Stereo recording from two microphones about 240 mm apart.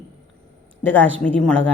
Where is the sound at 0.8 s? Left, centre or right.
Centre.